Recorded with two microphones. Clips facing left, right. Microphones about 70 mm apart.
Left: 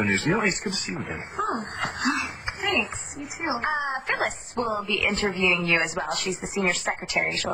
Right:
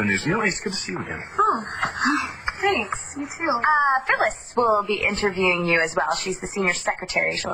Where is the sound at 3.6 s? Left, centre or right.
Right.